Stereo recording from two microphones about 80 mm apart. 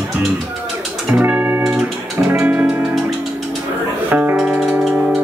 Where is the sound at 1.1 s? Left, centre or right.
Right.